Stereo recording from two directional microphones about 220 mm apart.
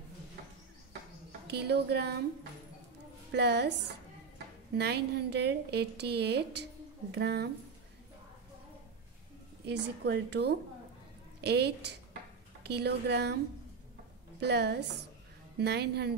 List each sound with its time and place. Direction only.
1.5 s a woman's voice: 50° right (ahead or behind)
3.3 s a woman's voice: 50° right (ahead or behind)
4.7 s a woman's voice: 50° right (ahead or behind)
9.7 s a woman's voice: 50° right (ahead or behind)
14.4 s a woman's voice: 50° right (ahead or behind)